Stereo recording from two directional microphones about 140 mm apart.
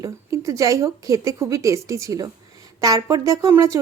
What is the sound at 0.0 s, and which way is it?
A woman's voice, 25° right (ahead or behind).